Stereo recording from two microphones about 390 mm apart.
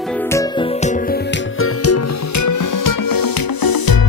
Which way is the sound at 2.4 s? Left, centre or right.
Left.